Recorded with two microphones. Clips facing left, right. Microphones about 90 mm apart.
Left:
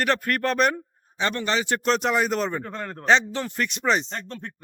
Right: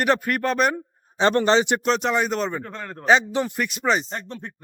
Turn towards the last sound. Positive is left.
turn(degrees=0)  # may be behind; listen again after turning